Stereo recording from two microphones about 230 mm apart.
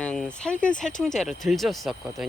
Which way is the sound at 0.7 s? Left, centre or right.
Centre.